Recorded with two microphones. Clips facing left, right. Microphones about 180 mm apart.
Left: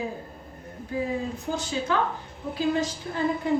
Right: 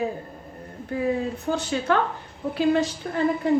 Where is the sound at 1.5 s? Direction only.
65° right (ahead or behind).